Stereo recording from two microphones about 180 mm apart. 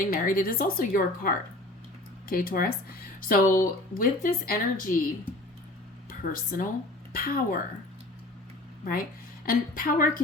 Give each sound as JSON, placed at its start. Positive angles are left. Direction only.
{"t": 0.0, "sound": "speech", "side_deg": 50}
{"t": 2.3, "sound": "speech", "side_deg": 55}
{"t": 6.1, "sound": "speech", "side_deg": 50}
{"t": 8.8, "sound": "speech", "side_deg": 50}